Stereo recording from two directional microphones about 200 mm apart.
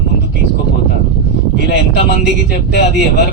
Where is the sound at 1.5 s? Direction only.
55° left (ahead or behind).